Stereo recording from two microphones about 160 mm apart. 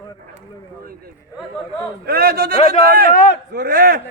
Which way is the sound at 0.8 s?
65° right (ahead or behind).